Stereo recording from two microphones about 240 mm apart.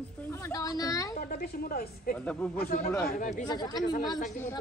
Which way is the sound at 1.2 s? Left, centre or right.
Left.